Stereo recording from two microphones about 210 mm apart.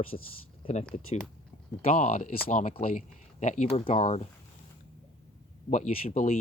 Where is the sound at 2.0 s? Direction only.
40° left (ahead or behind).